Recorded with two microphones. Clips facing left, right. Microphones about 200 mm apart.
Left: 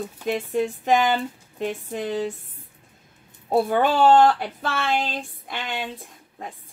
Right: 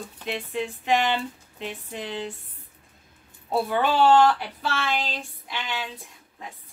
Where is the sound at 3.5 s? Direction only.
50° left (ahead or behind).